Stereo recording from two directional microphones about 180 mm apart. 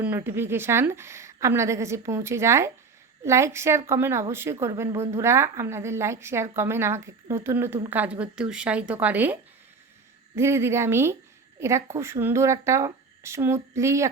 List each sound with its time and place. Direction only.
0.0 s a woman's voice: 10° right (ahead or behind)